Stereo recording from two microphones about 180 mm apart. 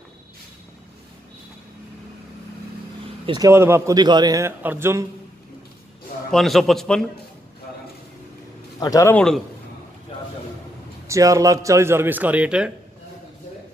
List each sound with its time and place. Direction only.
3.3 s a man's voice: 20° right (ahead or behind)
6.3 s a man's voice: centre (ahead or behind)
8.7 s a man's voice: 20° left (ahead or behind)
9.1 s a man's voice: 5° left (ahead or behind)
11.1 s a man's voice: 15° right (ahead or behind)